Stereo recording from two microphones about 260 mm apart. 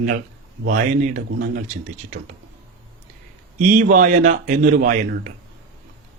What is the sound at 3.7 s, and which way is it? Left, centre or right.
Speech, right.